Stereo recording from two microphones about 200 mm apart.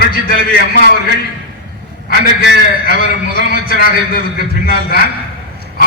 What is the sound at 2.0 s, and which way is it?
A man's voice, 50° left (ahead or behind).